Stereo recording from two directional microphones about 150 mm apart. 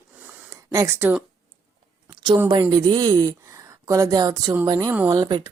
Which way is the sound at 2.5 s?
25° right (ahead or behind).